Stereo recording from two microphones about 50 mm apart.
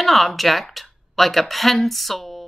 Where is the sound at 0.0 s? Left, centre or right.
Centre.